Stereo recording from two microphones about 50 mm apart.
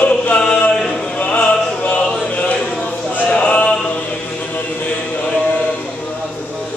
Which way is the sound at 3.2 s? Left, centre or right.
Left.